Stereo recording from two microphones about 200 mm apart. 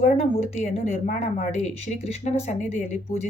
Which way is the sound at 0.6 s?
35° left (ahead or behind).